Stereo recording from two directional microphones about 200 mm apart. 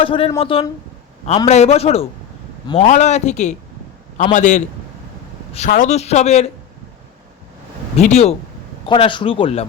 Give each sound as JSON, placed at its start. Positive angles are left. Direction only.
{"t": 0.0, "sound": "speech", "side_deg": 25}
{"t": 7.9, "sound": "speech", "side_deg": 35}